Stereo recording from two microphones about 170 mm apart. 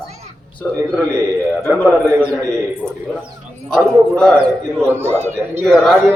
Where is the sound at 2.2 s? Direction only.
15° right (ahead or behind).